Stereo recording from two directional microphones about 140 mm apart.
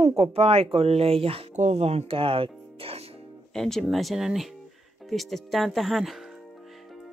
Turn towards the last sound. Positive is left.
turn(degrees=0)  # may be behind; listen again after turning